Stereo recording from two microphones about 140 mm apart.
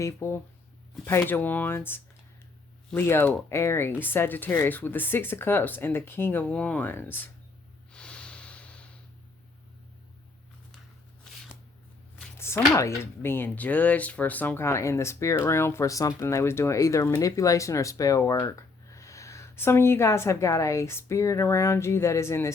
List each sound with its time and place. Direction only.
0.0 s speech: 20° left (ahead or behind)
7.9 s snort: 10° left (ahead or behind)
11.3 s shuffling cards: 5° left (ahead or behind)
12.4 s speech: 20° left (ahead or behind)